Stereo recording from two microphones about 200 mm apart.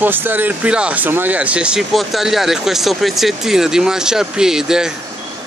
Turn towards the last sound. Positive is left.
turn(degrees=-5)  # may be behind; listen again after turning